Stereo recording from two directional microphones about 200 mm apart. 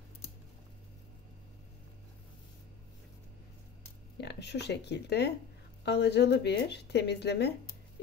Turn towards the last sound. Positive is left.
turn(degrees=55)  # may be behind; listen again after turning